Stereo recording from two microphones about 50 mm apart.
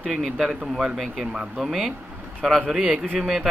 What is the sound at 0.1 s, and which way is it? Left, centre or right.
Speech, centre.